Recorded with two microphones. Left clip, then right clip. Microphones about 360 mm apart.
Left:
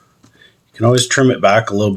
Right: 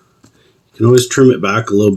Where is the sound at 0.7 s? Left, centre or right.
Centre.